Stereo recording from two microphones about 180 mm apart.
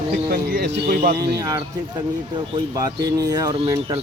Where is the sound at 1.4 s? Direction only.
20° right (ahead or behind).